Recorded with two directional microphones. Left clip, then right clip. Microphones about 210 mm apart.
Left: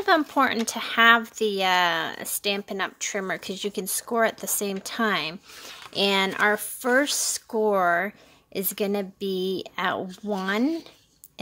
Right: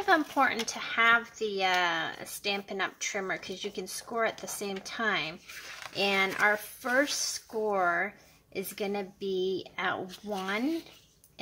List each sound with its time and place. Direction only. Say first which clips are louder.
0.0 s speech: left 4 dB; 50° left (ahead or behind)